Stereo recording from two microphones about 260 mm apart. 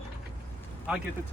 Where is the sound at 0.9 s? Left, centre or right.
Centre.